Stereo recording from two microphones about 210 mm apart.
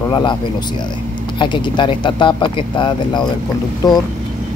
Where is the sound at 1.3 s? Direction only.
20° left (ahead or behind).